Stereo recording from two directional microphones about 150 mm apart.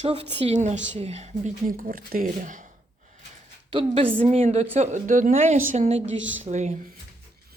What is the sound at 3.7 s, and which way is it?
A woman's voice, 35° right (ahead or behind).